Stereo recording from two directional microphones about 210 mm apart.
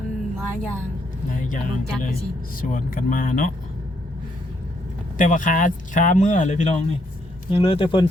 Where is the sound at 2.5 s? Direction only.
40° left (ahead or behind).